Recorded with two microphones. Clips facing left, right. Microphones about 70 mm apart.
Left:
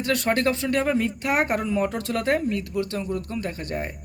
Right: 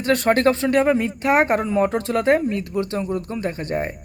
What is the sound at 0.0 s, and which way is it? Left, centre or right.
A man's voice, right.